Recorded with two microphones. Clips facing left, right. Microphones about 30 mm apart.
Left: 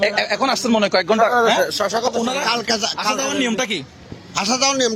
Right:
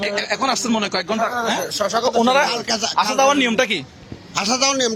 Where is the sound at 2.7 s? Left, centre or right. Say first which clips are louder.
Left 2 dB; centre.